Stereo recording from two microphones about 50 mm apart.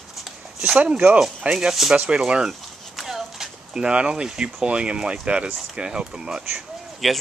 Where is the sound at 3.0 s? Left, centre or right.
Centre.